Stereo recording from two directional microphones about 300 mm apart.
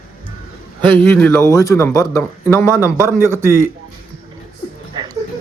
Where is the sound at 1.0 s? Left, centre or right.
Centre.